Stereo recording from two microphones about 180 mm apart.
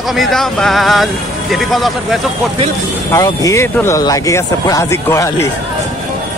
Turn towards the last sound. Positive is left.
turn(degrees=15)  # may be behind; listen again after turning